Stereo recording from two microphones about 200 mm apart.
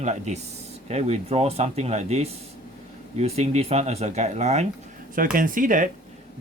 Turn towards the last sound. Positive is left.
turn(degrees=-40)  # may be behind; listen again after turning